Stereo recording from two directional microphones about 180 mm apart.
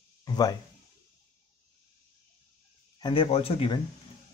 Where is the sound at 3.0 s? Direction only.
30° left (ahead or behind).